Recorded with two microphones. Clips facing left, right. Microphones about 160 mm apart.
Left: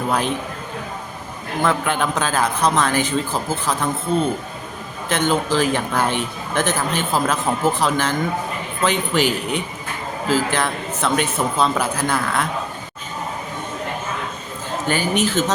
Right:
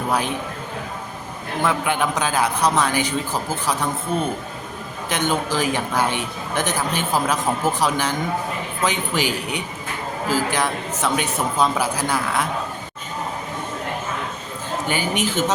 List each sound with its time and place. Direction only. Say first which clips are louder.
0.1 s a man's voice: left 1 dB; 10° right (ahead or behind)
1.6 s a man's voice: left 1 dB; 15° right (ahead or behind)
5.0 s a man's voice: left 3 dB; 15° right (ahead or behind)
14.8 s a man's voice: left 4 dB; 15° right (ahead or behind)